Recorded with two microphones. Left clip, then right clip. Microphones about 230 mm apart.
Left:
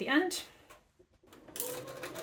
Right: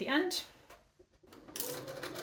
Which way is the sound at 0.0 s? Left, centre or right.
Left.